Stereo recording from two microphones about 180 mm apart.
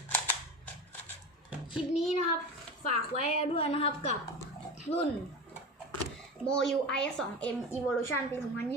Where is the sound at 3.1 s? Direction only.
35° left (ahead or behind).